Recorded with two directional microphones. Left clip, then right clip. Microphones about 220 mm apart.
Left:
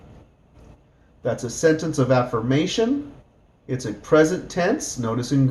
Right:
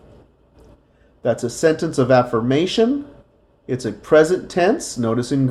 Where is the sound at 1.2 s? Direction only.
40° right (ahead or behind).